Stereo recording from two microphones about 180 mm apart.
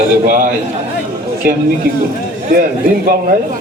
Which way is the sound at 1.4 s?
55° right (ahead or behind).